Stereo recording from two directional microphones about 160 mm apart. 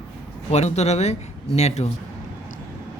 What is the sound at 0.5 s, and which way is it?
Speech, 45° left (ahead or behind).